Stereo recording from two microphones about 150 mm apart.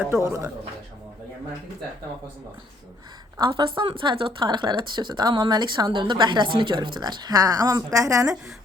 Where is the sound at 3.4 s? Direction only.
35° right (ahead or behind).